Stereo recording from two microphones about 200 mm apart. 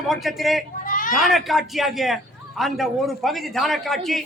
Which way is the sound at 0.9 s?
40° left (ahead or behind).